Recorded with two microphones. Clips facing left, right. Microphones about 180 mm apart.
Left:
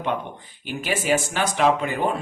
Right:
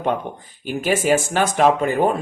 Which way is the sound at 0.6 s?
45° right (ahead or behind).